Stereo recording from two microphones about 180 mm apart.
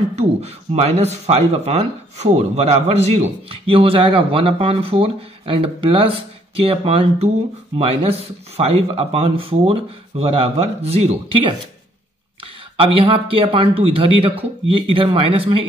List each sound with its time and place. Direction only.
0.1 s speech: 35° right (ahead or behind)
12.7 s speech: 30° right (ahead or behind)